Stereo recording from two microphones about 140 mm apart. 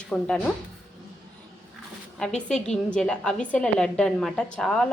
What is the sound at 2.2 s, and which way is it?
A woman's voice, 5° left (ahead or behind).